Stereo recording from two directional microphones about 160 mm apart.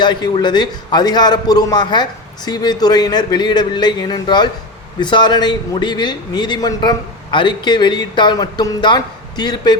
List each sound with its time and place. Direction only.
0.0 s a man's voice: 25° left (ahead or behind)